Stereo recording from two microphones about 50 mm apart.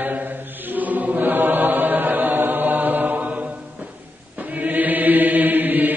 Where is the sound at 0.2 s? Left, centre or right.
Right.